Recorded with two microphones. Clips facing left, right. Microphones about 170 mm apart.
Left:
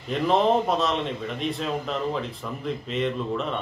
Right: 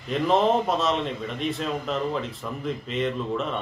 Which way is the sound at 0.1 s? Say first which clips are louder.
Even; centre (ahead or behind).